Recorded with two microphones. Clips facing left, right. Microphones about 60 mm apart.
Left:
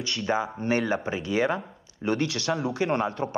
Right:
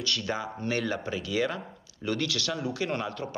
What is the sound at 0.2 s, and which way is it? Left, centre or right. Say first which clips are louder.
Speech: left 5 dB; left.